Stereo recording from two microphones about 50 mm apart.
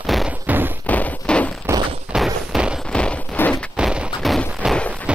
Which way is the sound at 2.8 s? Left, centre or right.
Centre.